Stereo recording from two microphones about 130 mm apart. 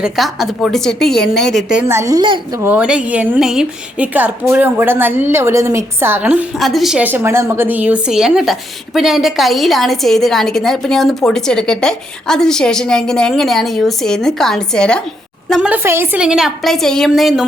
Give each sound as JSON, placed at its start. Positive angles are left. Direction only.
{"t": 0.0, "sound": "a woman's voice", "side_deg": 0}
{"t": 1.9, "sound": "a woman's voice", "side_deg": -25}
{"t": 2.6, "sound": "a woman's voice", "side_deg": -10}
{"t": 6.6, "sound": "a woman's voice", "side_deg": 0}
{"t": 7.0, "sound": "a woman's voice", "side_deg": -15}
{"t": 15.6, "sound": "a woman's voice", "side_deg": -15}
{"t": 16.2, "sound": "a woman's voice", "side_deg": -5}